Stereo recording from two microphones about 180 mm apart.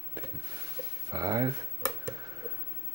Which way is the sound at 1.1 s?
20° right (ahead or behind).